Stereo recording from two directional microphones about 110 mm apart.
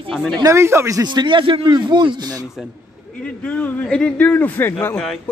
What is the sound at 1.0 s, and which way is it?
A man's voice, 45° right (ahead or behind).